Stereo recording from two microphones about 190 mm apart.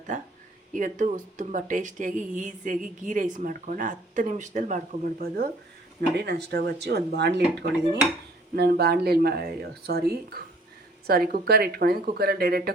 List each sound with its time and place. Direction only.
0.1 s speech: 40° right (ahead or behind)
6.0 s speech: 60° right (ahead or behind)